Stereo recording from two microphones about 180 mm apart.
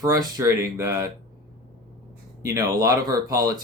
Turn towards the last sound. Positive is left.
turn(degrees=-20)  # may be behind; listen again after turning